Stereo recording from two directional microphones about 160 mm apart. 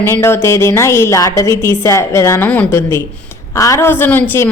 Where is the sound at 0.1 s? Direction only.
15° left (ahead or behind).